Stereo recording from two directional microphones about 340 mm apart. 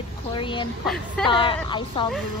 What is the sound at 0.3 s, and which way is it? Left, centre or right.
Speech, centre.